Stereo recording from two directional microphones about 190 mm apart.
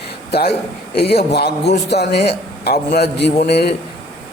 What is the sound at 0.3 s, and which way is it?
A man's voice, 60° left (ahead or behind).